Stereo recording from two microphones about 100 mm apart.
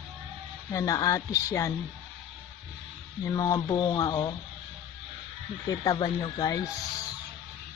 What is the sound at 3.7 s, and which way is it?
Speech, 60° left (ahead or behind).